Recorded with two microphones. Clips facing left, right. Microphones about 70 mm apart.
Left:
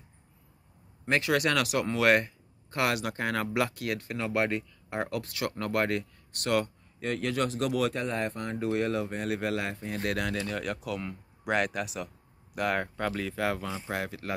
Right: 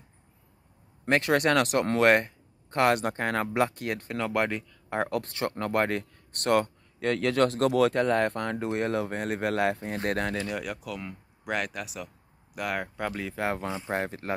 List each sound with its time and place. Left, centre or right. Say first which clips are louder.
1.0 s speech: right 3 dB; right
7.1 s speech: right 5 dB; right
8.5 s speech: left 3 dB; right
10.3 s speech: right 1 dB; right
10.6 s speech: left 2 dB; centre; by 14.3 s right